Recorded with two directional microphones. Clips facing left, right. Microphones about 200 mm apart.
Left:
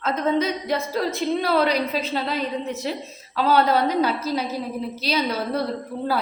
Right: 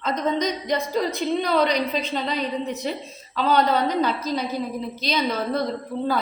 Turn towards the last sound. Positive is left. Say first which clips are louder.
# even
turn(degrees=10)  # may be behind; listen again after turning